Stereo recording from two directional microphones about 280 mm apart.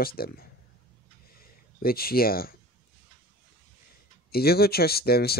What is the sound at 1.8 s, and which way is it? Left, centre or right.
Speech, left.